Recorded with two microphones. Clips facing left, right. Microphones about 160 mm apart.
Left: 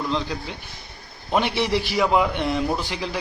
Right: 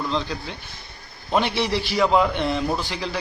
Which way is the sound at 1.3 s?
15° left (ahead or behind).